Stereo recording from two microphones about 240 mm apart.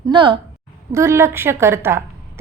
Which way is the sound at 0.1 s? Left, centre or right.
Centre.